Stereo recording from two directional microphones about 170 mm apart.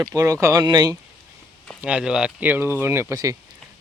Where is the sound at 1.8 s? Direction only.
5° right (ahead or behind).